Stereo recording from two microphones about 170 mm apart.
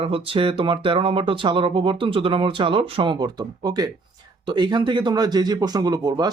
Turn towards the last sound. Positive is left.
turn(degrees=-20)  # may be behind; listen again after turning